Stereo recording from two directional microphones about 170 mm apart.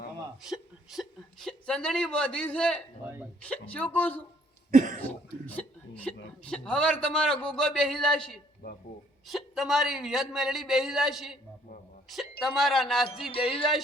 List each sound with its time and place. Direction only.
0.4 s a woman's voice: centre (ahead or behind)
4.7 s cough: 50° right (ahead or behind)
5.5 s hiccup: 10° left (ahead or behind)
6.4 s a woman's voice: 5° left (ahead or behind)
8.6 s speech: 65° left (ahead or behind)
9.2 s a woman's voice: centre (ahead or behind)